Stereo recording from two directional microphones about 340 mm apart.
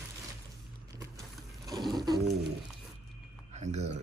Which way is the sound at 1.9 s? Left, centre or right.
Centre.